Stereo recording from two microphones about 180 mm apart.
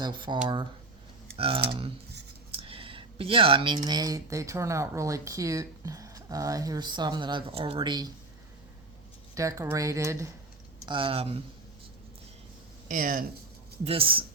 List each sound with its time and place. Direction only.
0.0 s speech: 25° right (ahead or behind)
1.4 s speech: 30° right (ahead or behind)
2.6 s a sound: 30° right (ahead or behind)
3.8 s speech: 20° right (ahead or behind)
9.3 s speech: 15° right (ahead or behind)
10.8 s speech: 25° right (ahead or behind)
12.9 s speech: 50° right (ahead or behind)
13.8 s speech: 30° right (ahead or behind)